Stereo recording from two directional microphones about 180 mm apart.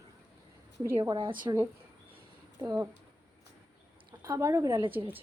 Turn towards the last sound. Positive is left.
turn(degrees=-20)  # may be behind; listen again after turning